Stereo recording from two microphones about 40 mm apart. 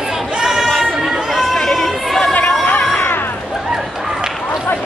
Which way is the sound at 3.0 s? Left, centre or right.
Left.